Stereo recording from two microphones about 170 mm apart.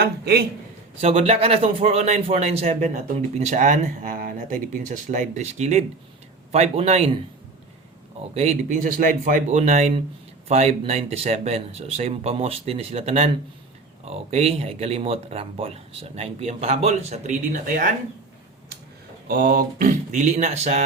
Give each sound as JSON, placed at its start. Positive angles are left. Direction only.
{"t": 0.0, "sound": "a man's voice", "side_deg": -70}
{"t": 1.0, "sound": "a man's voice", "side_deg": -35}
{"t": 8.4, "sound": "a man's voice", "side_deg": -45}
{"t": 19.3, "sound": "speech", "side_deg": -60}